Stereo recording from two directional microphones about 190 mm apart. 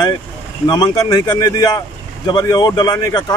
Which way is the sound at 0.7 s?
20° left (ahead or behind).